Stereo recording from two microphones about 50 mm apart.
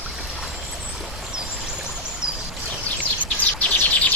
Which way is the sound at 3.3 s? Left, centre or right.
Left.